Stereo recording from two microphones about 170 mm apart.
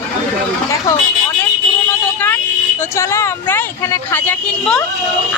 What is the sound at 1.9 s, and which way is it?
Speech, 10° left (ahead or behind).